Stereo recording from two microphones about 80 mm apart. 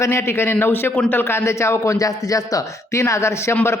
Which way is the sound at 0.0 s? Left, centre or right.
Left.